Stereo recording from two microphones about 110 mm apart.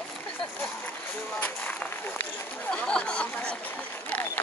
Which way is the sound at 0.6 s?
15° left (ahead or behind).